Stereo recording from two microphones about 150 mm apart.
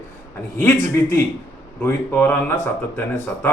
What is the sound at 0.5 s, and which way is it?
A man's voice, 15° left (ahead or behind).